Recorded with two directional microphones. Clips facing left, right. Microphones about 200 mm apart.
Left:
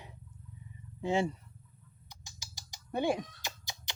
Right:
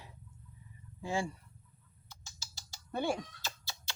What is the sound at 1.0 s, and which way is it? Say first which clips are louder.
Speech: left 5 dB; 20° left (ahead or behind).